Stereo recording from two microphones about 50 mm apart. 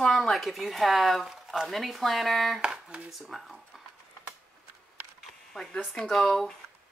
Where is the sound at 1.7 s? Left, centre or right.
Centre.